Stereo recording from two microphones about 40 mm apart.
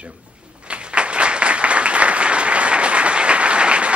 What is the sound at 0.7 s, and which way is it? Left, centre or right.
Applause, right.